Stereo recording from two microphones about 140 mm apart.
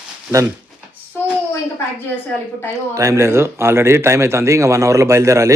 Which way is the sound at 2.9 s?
20° right (ahead or behind).